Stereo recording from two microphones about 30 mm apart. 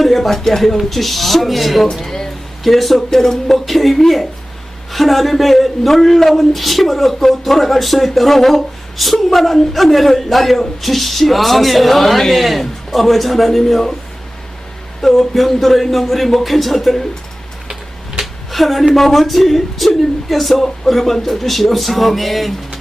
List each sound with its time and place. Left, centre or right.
0.0 s speech: centre
0.3 s a man's voice: centre
2.0 s music: centre
2.6 s a man's voice: centre
3.7 s a man's voice: centre
15.0 s a man's voice: centre
18.5 s a woman's voice: centre